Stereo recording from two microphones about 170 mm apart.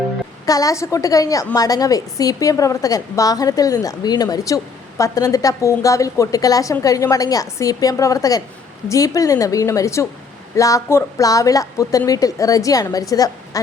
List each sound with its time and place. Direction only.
0.4 s a woman's voice: 20° left (ahead or behind)